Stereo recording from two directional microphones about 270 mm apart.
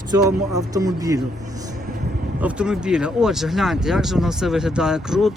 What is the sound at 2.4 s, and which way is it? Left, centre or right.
Speech, centre.